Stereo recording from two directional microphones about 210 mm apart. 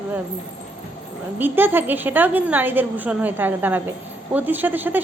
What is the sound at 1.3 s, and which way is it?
A woman's voice, 10° right (ahead or behind).